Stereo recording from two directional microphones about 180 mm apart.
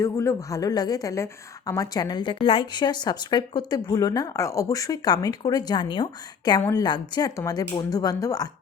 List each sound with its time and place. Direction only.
0.0 s a woman's voice: 15° left (ahead or behind)
6.6 s a woman's voice: 15° left (ahead or behind)